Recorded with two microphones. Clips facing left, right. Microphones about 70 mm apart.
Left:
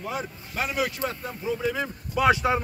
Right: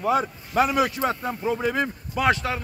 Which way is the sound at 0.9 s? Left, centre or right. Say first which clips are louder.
Right 6 dB; right.